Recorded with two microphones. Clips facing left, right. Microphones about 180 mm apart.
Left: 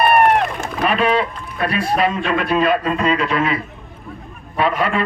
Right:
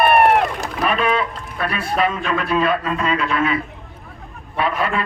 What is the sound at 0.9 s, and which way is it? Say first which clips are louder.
A man's voice: left 2 dB; 35° left (ahead or behind).